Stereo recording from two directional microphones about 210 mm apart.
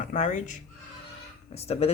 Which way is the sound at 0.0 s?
40° left (ahead or behind).